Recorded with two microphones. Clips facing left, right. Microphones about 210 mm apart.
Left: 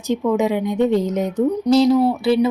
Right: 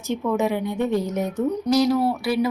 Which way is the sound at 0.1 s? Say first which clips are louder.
Left 4 dB; 15° left (ahead or behind).